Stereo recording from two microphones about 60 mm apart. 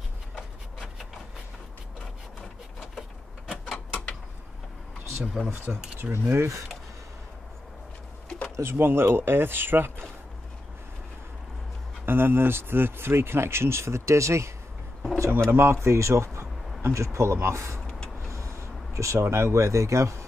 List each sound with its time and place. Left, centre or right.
2.8 s a sound: centre
3.7 s mechanisms: left
5.7 s speech: right
6.1 s speech: right
8.5 s speech: right
12.1 s speech: right
18.3 s a sound: right
19.2 s speech: right